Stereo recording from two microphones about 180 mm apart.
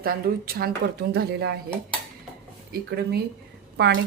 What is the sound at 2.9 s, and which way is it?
Speech, 60° right (ahead or behind).